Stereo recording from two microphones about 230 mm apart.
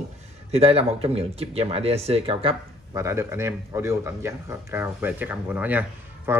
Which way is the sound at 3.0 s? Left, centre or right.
Centre.